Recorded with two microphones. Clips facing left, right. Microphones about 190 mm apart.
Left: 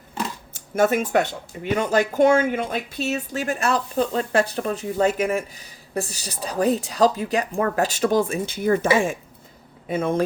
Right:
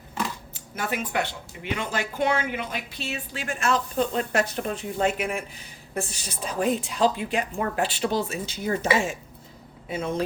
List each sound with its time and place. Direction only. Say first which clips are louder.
0.8 s speech: left 9 dB; 45° left (ahead or behind)